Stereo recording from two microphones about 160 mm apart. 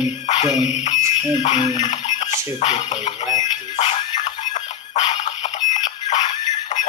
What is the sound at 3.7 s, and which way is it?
Music, 40° left (ahead or behind).